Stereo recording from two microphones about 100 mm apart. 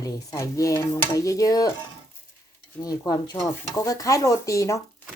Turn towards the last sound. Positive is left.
turn(degrees=30)  # may be behind; listen again after turning